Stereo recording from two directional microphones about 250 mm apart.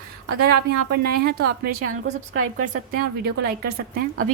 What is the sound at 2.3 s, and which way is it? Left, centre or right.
Speech, right.